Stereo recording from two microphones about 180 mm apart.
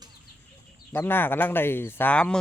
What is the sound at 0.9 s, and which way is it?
Speech, 10° left (ahead or behind).